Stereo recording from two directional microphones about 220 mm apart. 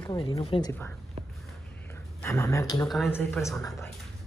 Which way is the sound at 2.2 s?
15° left (ahead or behind).